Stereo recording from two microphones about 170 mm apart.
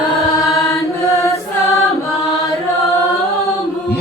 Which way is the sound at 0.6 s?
20° left (ahead or behind).